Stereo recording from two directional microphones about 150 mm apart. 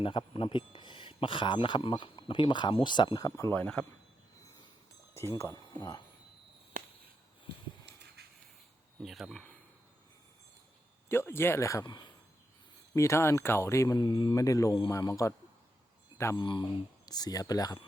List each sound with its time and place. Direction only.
0.0 s speech: 35° left (ahead or behind)
3.5 s a man's voice: 10° left (ahead or behind)
5.1 s speech: 20° left (ahead or behind)
6.8 s a sound: 70° right (ahead or behind)
9.0 s speech: centre (ahead or behind)
11.1 s a man's voice: 15° left (ahead or behind)
16.4 s speech: 30° left (ahead or behind)